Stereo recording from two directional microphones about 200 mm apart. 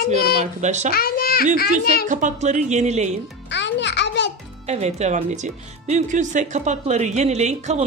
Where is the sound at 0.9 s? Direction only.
50° left (ahead or behind).